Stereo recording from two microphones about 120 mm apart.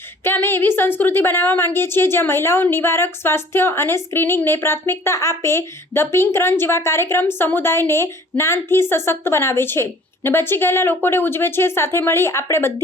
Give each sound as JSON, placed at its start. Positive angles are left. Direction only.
{"t": 0.3, "sound": "a woman's voice", "side_deg": 20}